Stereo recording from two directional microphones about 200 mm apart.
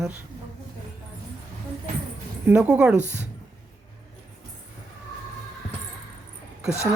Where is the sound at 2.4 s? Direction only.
10° right (ahead or behind).